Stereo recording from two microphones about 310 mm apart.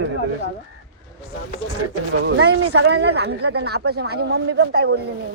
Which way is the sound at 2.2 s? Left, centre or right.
Right.